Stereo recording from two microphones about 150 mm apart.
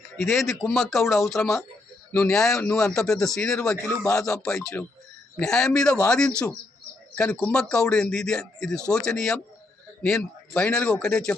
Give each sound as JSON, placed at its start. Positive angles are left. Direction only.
{"t": 0.2, "sound": "speech", "side_deg": 0}
{"t": 2.6, "sound": "speech", "side_deg": 20}
{"t": 3.0, "sound": "speech", "side_deg": 5}